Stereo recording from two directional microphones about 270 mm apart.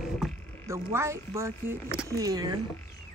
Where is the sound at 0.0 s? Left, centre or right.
Centre.